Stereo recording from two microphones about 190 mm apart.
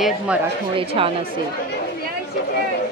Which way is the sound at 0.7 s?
30° right (ahead or behind).